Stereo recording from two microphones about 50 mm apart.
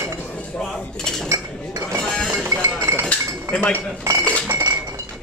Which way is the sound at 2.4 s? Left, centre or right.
Right.